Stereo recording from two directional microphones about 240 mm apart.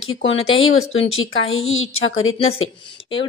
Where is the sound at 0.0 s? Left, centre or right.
Left.